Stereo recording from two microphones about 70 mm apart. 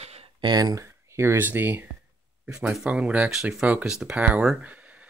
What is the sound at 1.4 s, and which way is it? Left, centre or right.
Speech, right.